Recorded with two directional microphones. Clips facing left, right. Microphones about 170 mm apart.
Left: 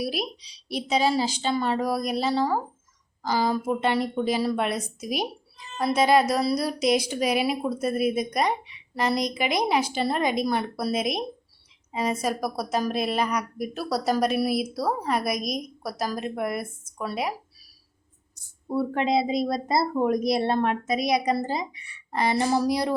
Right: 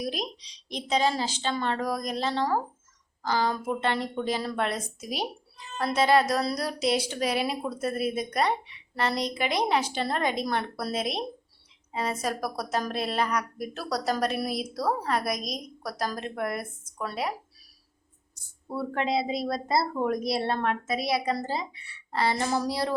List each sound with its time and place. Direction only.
0.0 s speech: 10° left (ahead or behind)
18.7 s speech: 15° left (ahead or behind)